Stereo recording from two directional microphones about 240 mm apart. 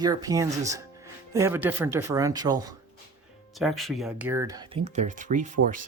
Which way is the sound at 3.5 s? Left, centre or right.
Centre.